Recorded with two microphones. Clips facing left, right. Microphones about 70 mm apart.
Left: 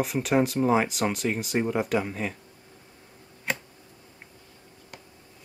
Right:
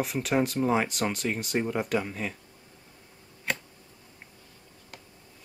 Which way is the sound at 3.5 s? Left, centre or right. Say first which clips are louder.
Left 1 dB; centre.